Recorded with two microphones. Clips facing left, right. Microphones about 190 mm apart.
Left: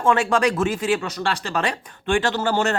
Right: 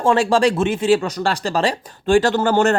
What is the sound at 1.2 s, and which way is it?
Speech, 40° right (ahead or behind).